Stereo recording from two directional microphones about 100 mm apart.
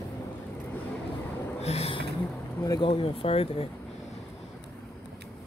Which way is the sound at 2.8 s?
60° left (ahead or behind).